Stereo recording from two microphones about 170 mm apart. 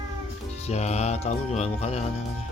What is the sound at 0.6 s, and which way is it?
Speech, 40° left (ahead or behind).